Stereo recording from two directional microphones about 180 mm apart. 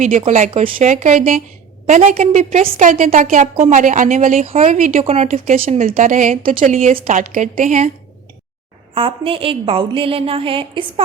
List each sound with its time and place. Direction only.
0.0 s a woman's voice: 40° right (ahead or behind)
4.4 s a woman's voice: 35° right (ahead or behind); by 5.7 s 50° right (ahead or behind)
5.7 s a woman's voice: 40° right (ahead or behind)
9.0 s a woman's voice: 30° right (ahead or behind)